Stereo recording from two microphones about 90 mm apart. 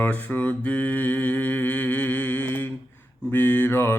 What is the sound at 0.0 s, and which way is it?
Mantra, 20° left (ahead or behind).